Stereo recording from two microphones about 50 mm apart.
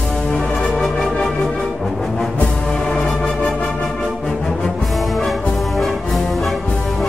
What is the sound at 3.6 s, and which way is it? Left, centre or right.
Music, centre.